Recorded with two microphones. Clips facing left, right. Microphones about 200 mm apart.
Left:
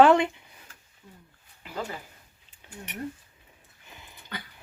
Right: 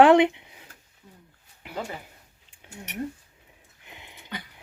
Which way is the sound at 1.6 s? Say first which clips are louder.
Right 1 dB; 15° right (ahead or behind).